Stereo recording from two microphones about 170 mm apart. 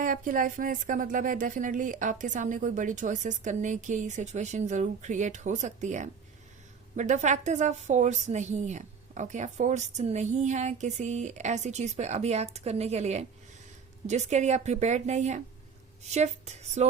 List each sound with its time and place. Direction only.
0.0 s a woman's voice: 50° right (ahead or behind)